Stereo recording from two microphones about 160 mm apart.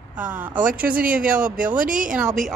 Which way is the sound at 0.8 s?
65° right (ahead or behind).